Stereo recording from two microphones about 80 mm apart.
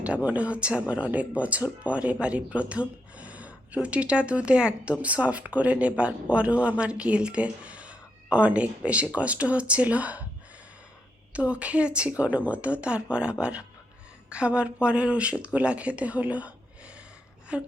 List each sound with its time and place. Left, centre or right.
0.0 s speech: centre
2.2 s a sound: centre
3.8 s speech: centre
11.3 s speech: centre
17.5 s speech: centre